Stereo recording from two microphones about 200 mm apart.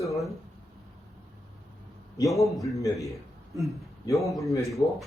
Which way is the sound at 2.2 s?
Centre (ahead or behind).